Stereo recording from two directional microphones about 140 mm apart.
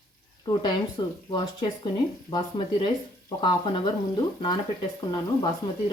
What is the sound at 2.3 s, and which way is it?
Speech, 35° left (ahead or behind).